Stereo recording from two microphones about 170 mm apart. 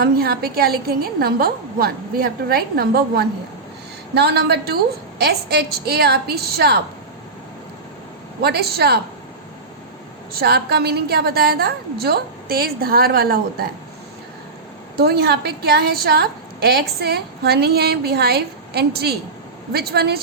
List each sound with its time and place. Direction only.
0.0 s a woman's voice: 65° right (ahead or behind)
8.4 s a woman's voice: 70° right (ahead or behind)
10.3 s a woman's voice: 70° right (ahead or behind)
14.9 s a woman's voice: 70° right (ahead or behind)